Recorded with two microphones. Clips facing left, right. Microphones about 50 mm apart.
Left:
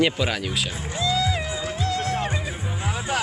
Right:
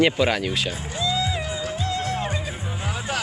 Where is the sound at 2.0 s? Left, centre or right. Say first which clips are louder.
Left 1 dB; left.